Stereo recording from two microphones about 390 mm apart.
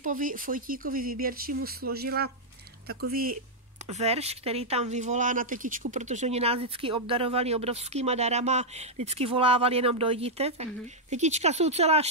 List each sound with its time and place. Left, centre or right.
0.0 s speech: right